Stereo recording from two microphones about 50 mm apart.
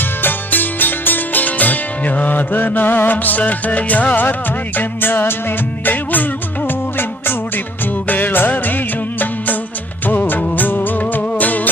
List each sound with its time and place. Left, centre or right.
0.2 s music: left
8.0 s music: left
10.1 s music of bollywood: left
11.1 s music: left